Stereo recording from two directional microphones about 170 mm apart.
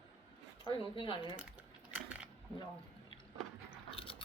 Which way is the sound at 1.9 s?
10° right (ahead or behind).